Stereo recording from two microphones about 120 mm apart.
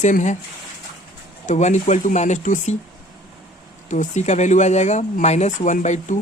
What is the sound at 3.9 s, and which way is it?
Speech, 80° left.